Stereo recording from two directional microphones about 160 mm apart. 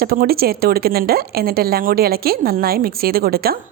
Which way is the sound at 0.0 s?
70° right (ahead or behind).